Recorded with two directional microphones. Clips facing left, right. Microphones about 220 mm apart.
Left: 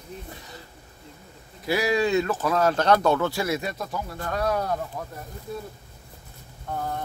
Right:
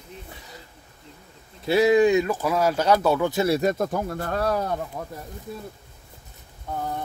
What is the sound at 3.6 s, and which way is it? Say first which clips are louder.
Speech: right 8 dB; 50° right (ahead or behind).